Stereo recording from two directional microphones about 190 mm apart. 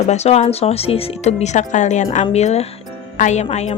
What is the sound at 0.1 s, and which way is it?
Speech, 35° left (ahead or behind).